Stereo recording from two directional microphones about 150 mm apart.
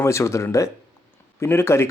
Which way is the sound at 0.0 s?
20° left (ahead or behind).